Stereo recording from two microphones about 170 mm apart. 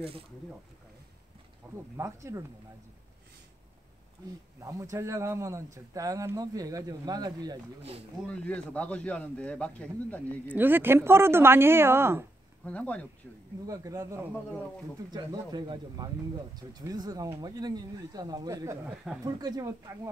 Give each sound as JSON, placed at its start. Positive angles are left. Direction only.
{"t": 2.0, "sound": "speech", "side_deg": -15}
{"t": 4.6, "sound": "speech", "side_deg": -15}
{"t": 8.3, "sound": "a man's voice", "side_deg": 5}
{"t": 10.4, "sound": "speech", "side_deg": -10}
{"t": 12.6, "sound": "a man's voice", "side_deg": 10}
{"t": 13.7, "sound": "speech", "side_deg": -20}